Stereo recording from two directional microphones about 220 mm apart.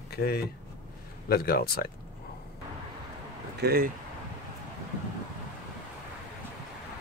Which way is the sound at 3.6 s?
45° right (ahead or behind).